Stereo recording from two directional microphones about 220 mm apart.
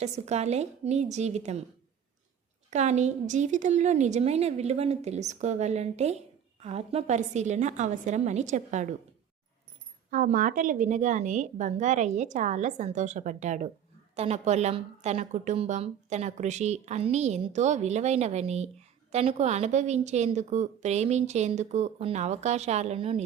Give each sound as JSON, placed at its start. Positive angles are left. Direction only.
{"t": 0.0, "sound": "a woman's voice", "side_deg": -30}
{"t": 2.6, "sound": "a woman's voice", "side_deg": -30}
{"t": 10.1, "sound": "a woman's voice", "side_deg": -40}